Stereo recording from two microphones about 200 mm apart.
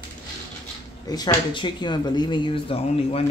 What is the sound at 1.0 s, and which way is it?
Speech, 20° left (ahead or behind).